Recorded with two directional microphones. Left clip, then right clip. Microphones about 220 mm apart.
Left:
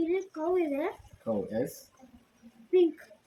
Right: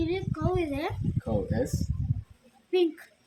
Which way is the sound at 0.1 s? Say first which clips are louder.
Left 1 dB; 15° right (ahead or behind).